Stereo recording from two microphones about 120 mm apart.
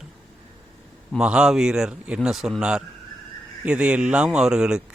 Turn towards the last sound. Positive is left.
turn(degrees=-5)  # may be behind; listen again after turning